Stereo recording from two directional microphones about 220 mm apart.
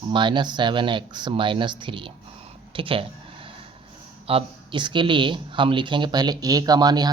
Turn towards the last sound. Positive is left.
turn(degrees=-20)  # may be behind; listen again after turning